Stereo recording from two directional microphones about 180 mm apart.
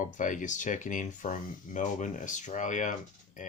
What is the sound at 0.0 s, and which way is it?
Speech, 45° left (ahead or behind).